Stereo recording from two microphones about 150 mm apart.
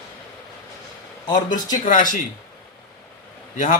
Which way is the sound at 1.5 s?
25° left (ahead or behind).